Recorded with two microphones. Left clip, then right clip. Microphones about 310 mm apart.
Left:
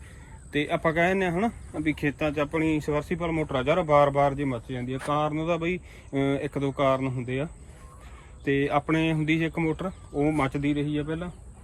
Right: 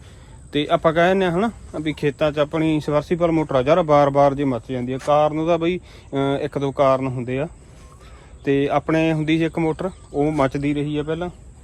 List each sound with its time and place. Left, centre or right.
0.5 s speech: centre